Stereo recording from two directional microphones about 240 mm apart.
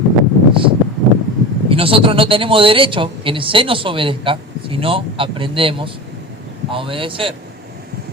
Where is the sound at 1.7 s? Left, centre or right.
Right.